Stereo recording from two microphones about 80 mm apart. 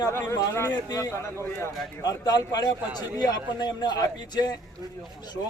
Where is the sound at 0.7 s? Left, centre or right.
Left.